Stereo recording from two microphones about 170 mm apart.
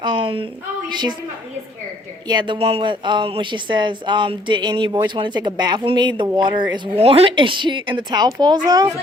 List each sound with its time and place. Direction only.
0.0 s a woman's voice: 30° right (ahead or behind)
2.2 s speech: 25° right (ahead or behind)